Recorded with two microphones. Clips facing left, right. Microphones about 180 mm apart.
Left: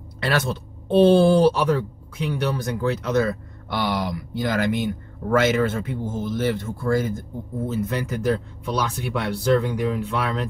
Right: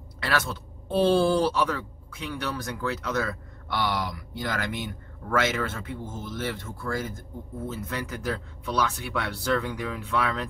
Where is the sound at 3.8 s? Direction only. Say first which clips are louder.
Left 4 dB; 55° left (ahead or behind).